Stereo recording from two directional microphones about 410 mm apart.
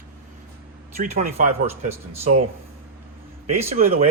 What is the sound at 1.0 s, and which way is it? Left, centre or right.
Speech, centre.